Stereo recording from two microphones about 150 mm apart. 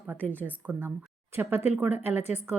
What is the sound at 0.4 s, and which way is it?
Speech, 10° right (ahead or behind).